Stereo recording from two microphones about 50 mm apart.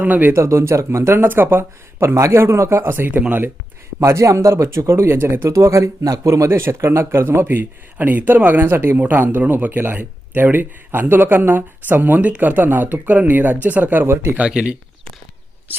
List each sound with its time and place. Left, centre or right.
0.0 s speech: right
0.3 s speech: right
2.0 s speech: right
2.6 s speech: right
4.0 s speech: right
7.4 s speech: right
9.0 s speech: right
14.1 s speech: right
14.3 s speech: right